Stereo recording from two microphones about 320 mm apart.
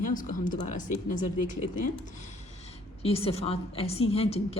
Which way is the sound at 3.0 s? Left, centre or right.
Centre.